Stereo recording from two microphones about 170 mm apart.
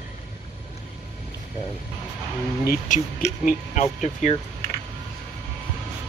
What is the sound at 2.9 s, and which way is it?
Speech, 50° left (ahead or behind).